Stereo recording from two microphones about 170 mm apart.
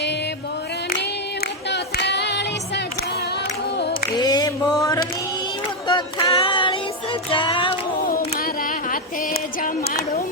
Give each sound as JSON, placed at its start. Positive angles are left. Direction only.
{"t": 1.7, "sound": "female singing", "side_deg": 90}
{"t": 3.8, "sound": "singing", "side_deg": 80}
{"t": 4.2, "sound": "mantra", "side_deg": 25}
{"t": 5.9, "sound": "a sound", "side_deg": 30}
{"t": 7.3, "sound": "music", "side_deg": 30}